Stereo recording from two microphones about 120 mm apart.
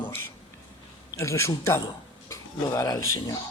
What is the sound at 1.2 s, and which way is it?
Speech, 25° left (ahead or behind).